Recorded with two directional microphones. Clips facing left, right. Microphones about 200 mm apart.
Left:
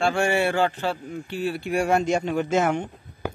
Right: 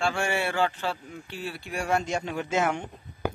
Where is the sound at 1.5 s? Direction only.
65° left (ahead or behind); by 2.7 s 45° left (ahead or behind).